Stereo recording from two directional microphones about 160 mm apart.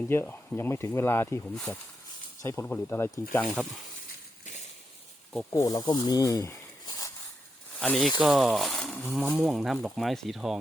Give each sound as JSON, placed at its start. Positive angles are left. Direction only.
{"t": 0.1, "sound": "speech", "side_deg": 15}
{"t": 2.4, "sound": "speech", "side_deg": 20}
{"t": 5.5, "sound": "speech", "side_deg": 20}
{"t": 7.8, "sound": "speech", "side_deg": 0}